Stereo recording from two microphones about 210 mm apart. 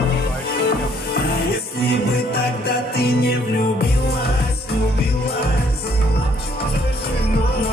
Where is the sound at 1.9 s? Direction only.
50° left (ahead or behind).